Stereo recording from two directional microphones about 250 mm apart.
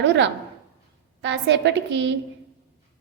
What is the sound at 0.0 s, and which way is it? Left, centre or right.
A woman's voice, right.